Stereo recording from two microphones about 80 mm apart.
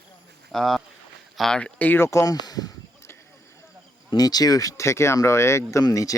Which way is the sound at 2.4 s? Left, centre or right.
Left.